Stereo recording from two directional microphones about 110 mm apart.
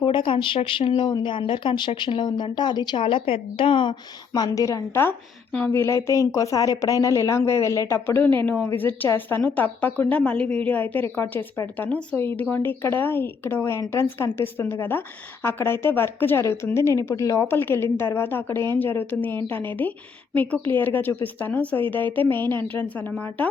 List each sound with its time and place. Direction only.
0.0 s speech: 45° left (ahead or behind)
3.0 s speech: 55° left (ahead or behind)
4.3 s a woman's voice: 30° left (ahead or behind)
5.5 s speech: 10° left (ahead or behind)
5.8 s a woman's voice: 25° left (ahead or behind)